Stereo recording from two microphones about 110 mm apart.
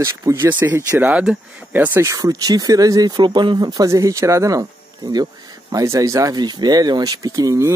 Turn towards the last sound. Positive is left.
turn(degrees=-30)  # may be behind; listen again after turning